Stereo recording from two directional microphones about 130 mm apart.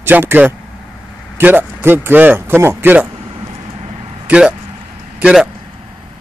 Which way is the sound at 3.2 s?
50° right (ahead or behind).